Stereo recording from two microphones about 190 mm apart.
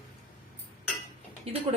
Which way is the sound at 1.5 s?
30° right (ahead or behind).